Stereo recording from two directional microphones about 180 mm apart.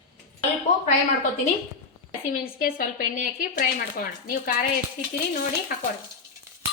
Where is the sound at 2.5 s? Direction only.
55° left (ahead or behind).